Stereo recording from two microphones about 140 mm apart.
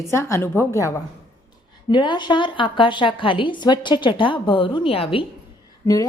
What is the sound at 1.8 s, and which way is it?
A woman's voice, 35° left (ahead or behind).